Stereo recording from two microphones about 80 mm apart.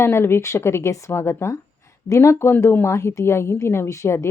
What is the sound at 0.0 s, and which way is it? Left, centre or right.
A woman's voice, left.